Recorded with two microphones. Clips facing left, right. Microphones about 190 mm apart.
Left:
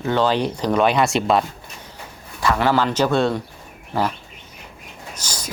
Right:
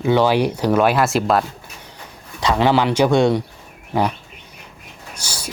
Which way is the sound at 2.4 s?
20° right (ahead or behind).